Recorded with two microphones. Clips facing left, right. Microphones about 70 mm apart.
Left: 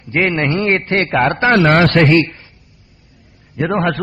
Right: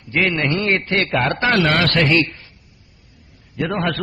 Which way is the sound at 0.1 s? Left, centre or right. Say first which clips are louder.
Left 3 dB; left.